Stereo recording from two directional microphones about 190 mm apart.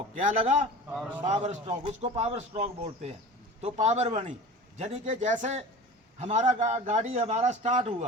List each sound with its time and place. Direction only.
0.1 s a man's voice: 40° right (ahead or behind)